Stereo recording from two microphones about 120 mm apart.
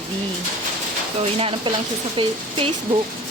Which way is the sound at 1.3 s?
55° right (ahead or behind).